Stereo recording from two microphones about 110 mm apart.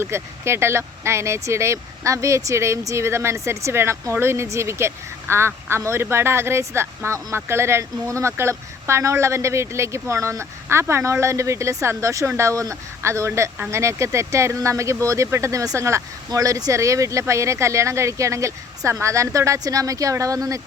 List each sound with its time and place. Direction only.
0.0 s speech: 25° right (ahead or behind)